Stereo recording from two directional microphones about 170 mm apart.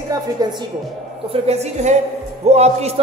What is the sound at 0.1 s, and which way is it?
Speech, 25° right (ahead or behind).